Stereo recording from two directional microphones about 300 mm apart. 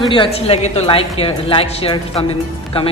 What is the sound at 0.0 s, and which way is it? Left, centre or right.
A woman's voice, centre.